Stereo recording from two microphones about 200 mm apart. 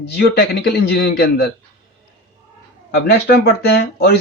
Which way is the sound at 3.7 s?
55° left (ahead or behind).